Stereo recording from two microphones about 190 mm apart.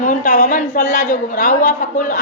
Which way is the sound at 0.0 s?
45° left (ahead or behind).